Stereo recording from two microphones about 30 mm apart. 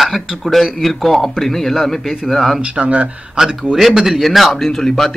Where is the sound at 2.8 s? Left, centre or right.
Right.